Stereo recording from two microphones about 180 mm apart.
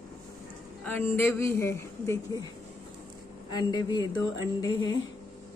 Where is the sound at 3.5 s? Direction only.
20° left (ahead or behind).